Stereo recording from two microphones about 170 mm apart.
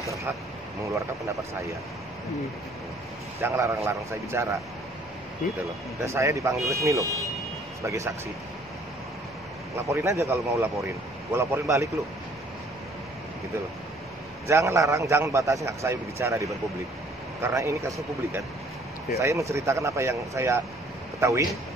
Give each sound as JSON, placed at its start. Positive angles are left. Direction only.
{"t": 3.3, "sound": "speech", "side_deg": -15}
{"t": 5.9, "sound": "speech", "side_deg": -15}
{"t": 9.8, "sound": "speech", "side_deg": -15}
{"t": 14.5, "sound": "speech", "side_deg": -15}